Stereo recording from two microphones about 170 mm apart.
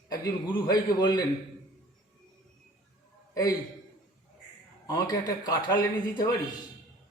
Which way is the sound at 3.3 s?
20° left (ahead or behind).